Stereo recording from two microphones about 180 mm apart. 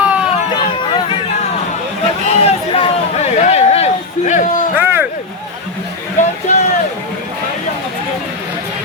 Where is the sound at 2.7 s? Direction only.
35° left (ahead or behind).